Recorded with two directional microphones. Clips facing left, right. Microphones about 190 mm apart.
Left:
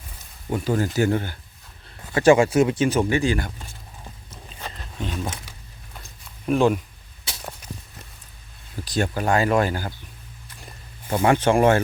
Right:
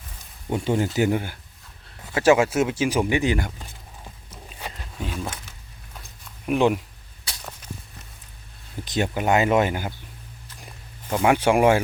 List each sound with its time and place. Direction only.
0.5 s speech: 20° right (ahead or behind)
4.3 s a sound: 10° right (ahead or behind)
5.2 s speech: 15° left (ahead or behind)
5.9 s a sound: centre (ahead or behind)
6.5 s speech: 20° right (ahead or behind)
8.8 s speech: 20° right (ahead or behind)
11.2 s speech: 10° right (ahead or behind)